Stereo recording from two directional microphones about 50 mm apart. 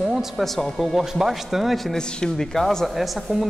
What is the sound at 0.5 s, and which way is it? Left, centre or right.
Speech, centre.